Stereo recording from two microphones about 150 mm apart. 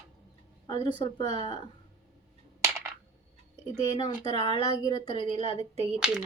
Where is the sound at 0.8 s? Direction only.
30° left (ahead or behind).